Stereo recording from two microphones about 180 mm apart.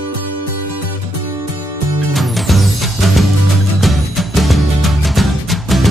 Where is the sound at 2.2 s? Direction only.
Centre (ahead or behind).